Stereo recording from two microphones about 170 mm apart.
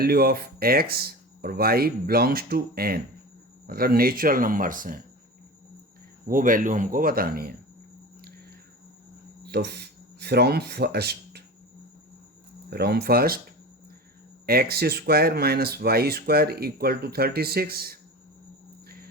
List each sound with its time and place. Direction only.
0.0 s speech: 65° right (ahead or behind)
6.2 s speech: 55° right (ahead or behind)
9.4 s speech: 70° right (ahead or behind)
12.7 s speech: 70° right (ahead or behind)
14.4 s speech: 65° right (ahead or behind)
18.9 s a sound: 60° right (ahead or behind)